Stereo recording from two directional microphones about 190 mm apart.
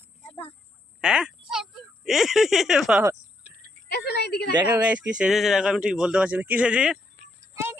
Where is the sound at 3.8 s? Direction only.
60° left (ahead or behind).